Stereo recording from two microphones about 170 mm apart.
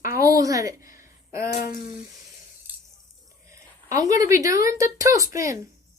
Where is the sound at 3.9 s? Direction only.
20° right (ahead or behind).